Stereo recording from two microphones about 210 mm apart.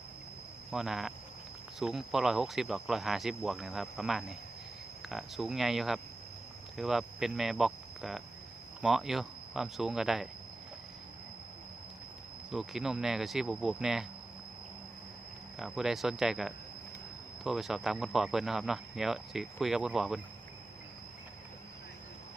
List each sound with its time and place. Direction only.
0.7 s speech: centre (ahead or behind)
12.5 s speech: centre (ahead or behind)
15.5 s speech: centre (ahead or behind)